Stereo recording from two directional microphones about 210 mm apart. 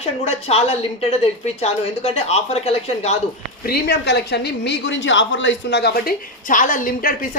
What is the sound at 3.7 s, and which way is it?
Speech, 50° left (ahead or behind).